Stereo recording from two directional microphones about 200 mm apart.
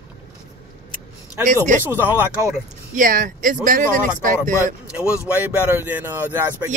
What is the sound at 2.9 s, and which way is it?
Speech, 40° right (ahead or behind).